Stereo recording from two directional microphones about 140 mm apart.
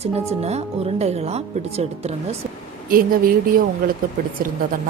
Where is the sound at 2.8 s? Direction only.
90° right.